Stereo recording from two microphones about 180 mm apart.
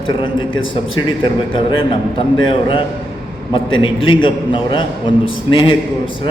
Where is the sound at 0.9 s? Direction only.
25° left (ahead or behind).